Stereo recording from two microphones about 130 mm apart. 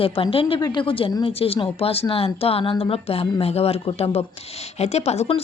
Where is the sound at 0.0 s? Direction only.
45° left (ahead or behind).